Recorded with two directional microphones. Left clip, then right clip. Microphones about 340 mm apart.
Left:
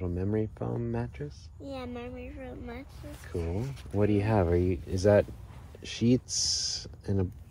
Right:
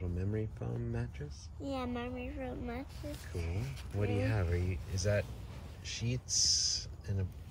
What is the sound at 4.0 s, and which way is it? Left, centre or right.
Speech, centre.